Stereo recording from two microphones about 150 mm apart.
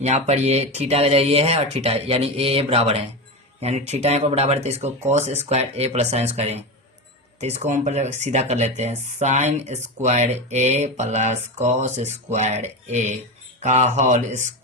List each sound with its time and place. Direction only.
0.0 s speech: 45° right (ahead or behind)